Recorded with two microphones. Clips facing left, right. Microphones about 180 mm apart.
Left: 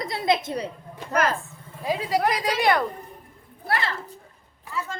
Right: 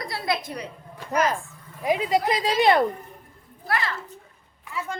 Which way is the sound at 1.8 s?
20° right (ahead or behind).